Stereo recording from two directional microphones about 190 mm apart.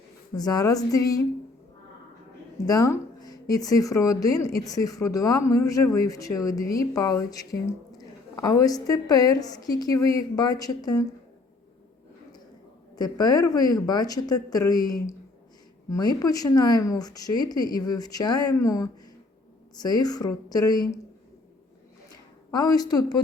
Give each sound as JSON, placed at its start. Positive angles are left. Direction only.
{"t": 0.3, "sound": "speech", "side_deg": 20}
{"t": 2.6, "sound": "speech", "side_deg": 15}
{"t": 13.0, "sound": "speech", "side_deg": 20}
{"t": 22.5, "sound": "speech", "side_deg": 20}